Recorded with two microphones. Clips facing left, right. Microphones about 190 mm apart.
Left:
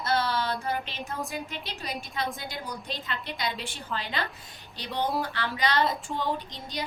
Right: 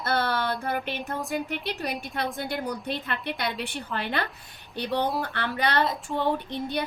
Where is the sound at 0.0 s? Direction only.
60° right (ahead or behind).